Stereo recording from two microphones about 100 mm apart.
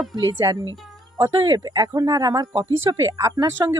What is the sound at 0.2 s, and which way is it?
Speech, 40° right (ahead or behind).